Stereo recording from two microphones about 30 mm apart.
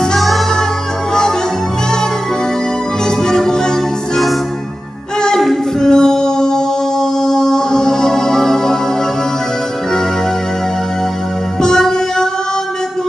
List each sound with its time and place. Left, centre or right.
3.3 s music: centre
5.8 s music: left